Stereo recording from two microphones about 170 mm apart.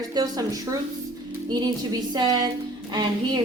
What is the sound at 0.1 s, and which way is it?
Speech, 20° right (ahead or behind).